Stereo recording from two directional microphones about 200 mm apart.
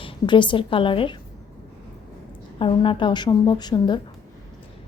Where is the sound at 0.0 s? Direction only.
25° left (ahead or behind).